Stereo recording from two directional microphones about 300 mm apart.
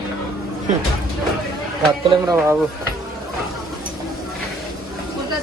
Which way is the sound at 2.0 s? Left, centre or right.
Centre.